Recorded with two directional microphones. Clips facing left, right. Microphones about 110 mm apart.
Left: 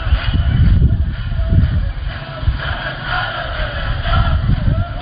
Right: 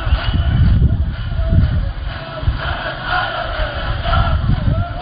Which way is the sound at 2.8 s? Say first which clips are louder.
Right 3 dB; 30° right (ahead or behind).